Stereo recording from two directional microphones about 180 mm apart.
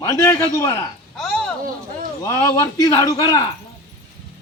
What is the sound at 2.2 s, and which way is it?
Speech, 15° left (ahead or behind).